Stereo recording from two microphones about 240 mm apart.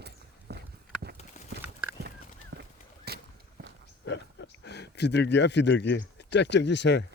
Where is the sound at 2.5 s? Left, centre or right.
Right.